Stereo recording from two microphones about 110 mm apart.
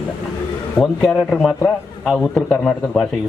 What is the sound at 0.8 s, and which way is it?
A man's voice, 10° left (ahead or behind).